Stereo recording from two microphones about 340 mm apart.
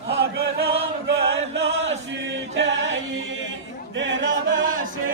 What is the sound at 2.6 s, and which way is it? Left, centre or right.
Music, right.